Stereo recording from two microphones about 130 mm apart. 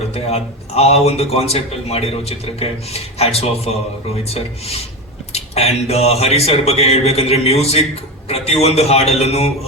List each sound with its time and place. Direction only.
0.1 s a man's voice: 50° left (ahead or behind)